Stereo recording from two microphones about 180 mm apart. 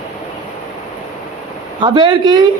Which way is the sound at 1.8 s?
25° right (ahead or behind).